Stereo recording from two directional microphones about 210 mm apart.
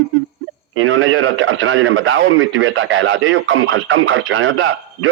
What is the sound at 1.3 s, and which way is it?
Speech, 70° right (ahead or behind).